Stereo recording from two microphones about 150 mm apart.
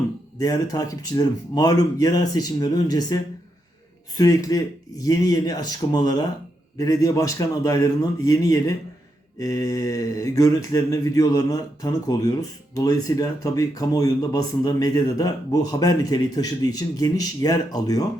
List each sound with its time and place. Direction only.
0.3 s speech: 25° left (ahead or behind)
4.4 s speech: 25° left (ahead or behind)